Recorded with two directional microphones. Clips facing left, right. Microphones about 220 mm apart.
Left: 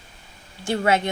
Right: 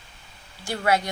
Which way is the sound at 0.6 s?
25° left (ahead or behind).